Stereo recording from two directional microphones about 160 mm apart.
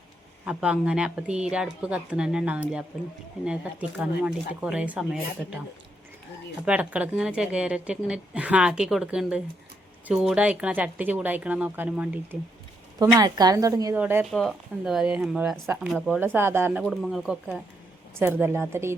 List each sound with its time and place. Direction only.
0.4 s a woman's voice: 5° right (ahead or behind)
6.7 s a woman's voice: 10° right (ahead or behind)
13.0 s a woman's voice: 25° right (ahead or behind)
13.9 s a woman's voice: 10° right (ahead or behind)
14.3 s speech: centre (ahead or behind)
15.6 s a woman's voice: 15° right (ahead or behind)
15.9 s a woman's voice: centre (ahead or behind)
16.8 s speech: centre (ahead or behind)
18.2 s a woman's voice: 10° right (ahead or behind)